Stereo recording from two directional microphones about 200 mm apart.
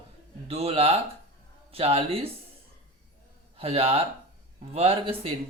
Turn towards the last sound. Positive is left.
turn(degrees=-30)  # may be behind; listen again after turning